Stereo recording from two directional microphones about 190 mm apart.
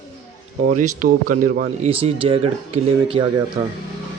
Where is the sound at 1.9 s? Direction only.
30° right (ahead or behind).